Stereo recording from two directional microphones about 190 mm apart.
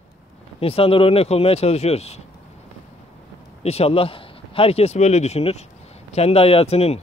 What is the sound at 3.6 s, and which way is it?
Speech, 30° left (ahead or behind).